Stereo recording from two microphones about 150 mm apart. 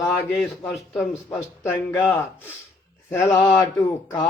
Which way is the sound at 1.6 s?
15° left (ahead or behind).